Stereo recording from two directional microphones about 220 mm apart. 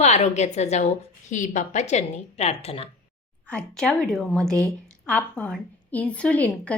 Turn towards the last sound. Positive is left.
turn(degrees=5)  # may be behind; listen again after turning